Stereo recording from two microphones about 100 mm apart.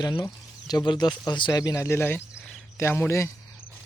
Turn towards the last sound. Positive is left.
turn(degrees=25)  # may be behind; listen again after turning